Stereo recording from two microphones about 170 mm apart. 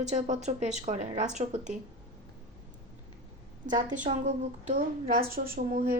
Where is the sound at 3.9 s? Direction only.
45° right (ahead or behind).